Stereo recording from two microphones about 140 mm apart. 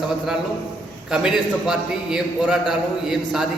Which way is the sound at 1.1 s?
5° right (ahead or behind).